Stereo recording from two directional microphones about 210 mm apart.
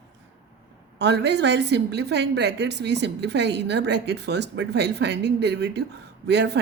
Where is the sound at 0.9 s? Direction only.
55° right (ahead or behind).